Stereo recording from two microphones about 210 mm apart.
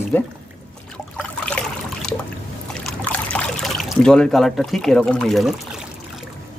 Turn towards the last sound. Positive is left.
turn(degrees=0)  # may be behind; listen again after turning